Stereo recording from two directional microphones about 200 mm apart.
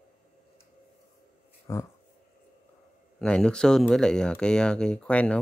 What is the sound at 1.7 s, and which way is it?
Speech, 10° left (ahead or behind).